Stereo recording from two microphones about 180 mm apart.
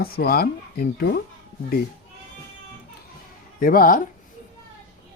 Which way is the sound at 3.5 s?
50° left (ahead or behind).